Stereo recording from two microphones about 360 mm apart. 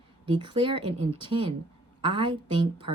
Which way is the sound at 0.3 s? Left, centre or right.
Centre.